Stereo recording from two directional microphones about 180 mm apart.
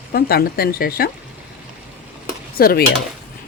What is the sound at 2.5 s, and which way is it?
Speech, 55° left (ahead or behind).